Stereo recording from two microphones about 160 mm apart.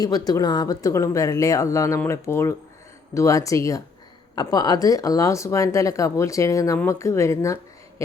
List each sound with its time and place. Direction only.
0.0 s speech: 25° left (ahead or behind)